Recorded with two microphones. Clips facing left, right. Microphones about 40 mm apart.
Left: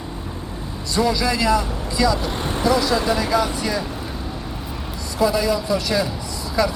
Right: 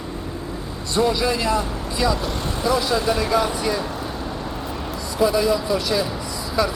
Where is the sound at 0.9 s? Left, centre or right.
Right.